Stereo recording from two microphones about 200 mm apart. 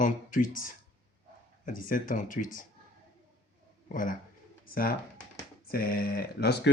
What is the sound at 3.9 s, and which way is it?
Speech, 40° left (ahead or behind).